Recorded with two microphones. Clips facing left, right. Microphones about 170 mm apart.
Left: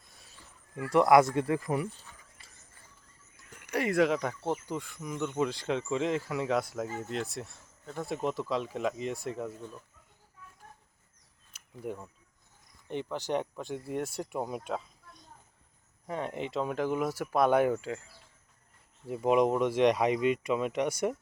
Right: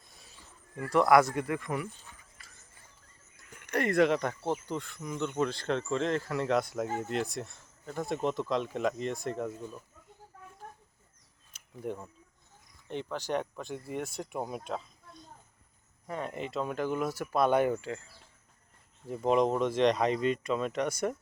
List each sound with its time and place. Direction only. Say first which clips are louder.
0.8 s speech: left 1 dB; 20° left (ahead or behind)
2.4 s a sound: right 1 dB; 30° left (ahead or behind)
3.7 s speech: right 1 dB; 5° left (ahead or behind)
11.5 s a sound: right 1 dB; 5° left (ahead or behind)
12.9 s speech: left 1 dB; 15° left (ahead or behind)
14.3 s speech: left 1 dB; centre (ahead or behind)
16.0 s speech: left 2 dB; 15° left (ahead or behind)
19.0 s speech: left 1 dB; 10° left (ahead or behind)